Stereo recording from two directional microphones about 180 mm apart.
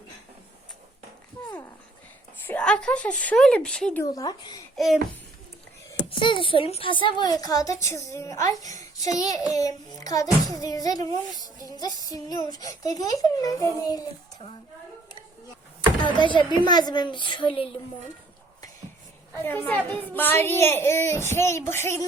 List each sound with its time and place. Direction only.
2.5 s speech: 5° left (ahead or behind)
4.0 s a child's voice: 20° left (ahead or behind)
6.1 s a child's voice: 25° left (ahead or behind)
16.0 s a child's voice: 25° left (ahead or behind)
19.3 s a woman's voice: 10° left (ahead or behind)